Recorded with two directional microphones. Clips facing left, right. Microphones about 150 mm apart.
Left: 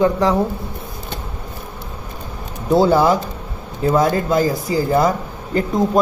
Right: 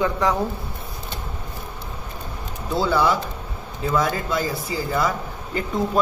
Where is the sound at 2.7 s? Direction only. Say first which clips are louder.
Left 7 dB; 45° left (ahead or behind).